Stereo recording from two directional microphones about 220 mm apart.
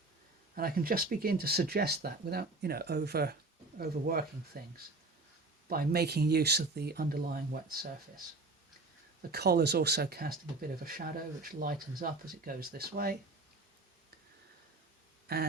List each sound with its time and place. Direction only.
0.5 s speech: 40° right (ahead or behind)
9.3 s speech: 50° right (ahead or behind)
15.3 s speech: 45° right (ahead or behind)